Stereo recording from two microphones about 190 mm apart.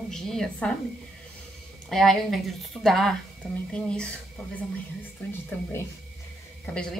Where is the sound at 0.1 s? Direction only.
5° left (ahead or behind).